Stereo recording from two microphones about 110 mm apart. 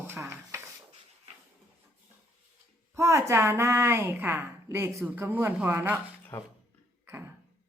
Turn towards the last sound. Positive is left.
turn(degrees=-20)  # may be behind; listen again after turning